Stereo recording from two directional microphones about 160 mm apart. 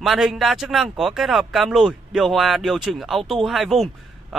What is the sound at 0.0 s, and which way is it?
Speech, centre (ahead or behind).